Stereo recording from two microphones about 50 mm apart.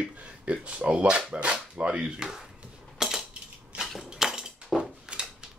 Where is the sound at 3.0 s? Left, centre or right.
Centre.